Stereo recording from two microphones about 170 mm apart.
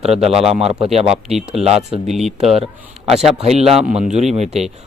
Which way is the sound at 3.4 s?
40° right (ahead or behind).